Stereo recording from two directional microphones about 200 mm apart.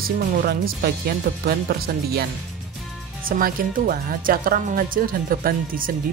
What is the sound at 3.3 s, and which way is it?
Speech, 45° right (ahead or behind).